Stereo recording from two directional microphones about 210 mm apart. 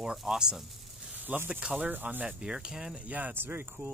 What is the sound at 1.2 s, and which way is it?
Speech, 10° right (ahead or behind).